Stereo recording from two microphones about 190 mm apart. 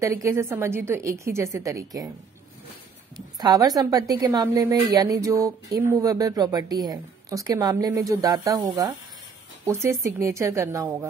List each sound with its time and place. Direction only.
0.0 s a woman's voice: 15° right (ahead or behind)
3.3 s a woman's voice: 20° right (ahead or behind)